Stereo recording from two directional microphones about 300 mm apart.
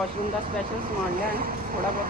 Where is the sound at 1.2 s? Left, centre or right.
Right.